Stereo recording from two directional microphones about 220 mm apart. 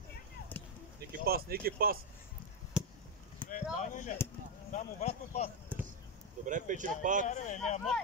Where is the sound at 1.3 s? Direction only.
45° right (ahead or behind).